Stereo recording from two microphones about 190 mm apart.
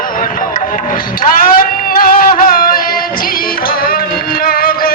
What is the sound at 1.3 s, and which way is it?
Music, 50° left (ahead or behind).